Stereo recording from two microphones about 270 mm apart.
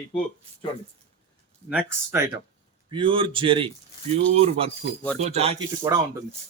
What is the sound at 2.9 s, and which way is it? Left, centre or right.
Speech, centre.